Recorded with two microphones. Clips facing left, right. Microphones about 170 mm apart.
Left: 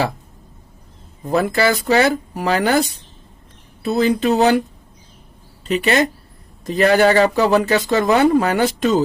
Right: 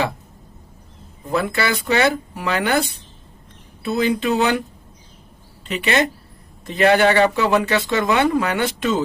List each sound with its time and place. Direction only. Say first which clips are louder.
1.3 s speech: left 4 dB; 40° left (ahead or behind)
5.6 s speech: left 3 dB; 40° left (ahead or behind)